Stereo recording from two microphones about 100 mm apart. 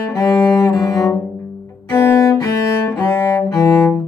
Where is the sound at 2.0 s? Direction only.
30° left (ahead or behind).